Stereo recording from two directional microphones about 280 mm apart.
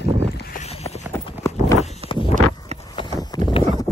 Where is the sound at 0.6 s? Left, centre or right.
Left.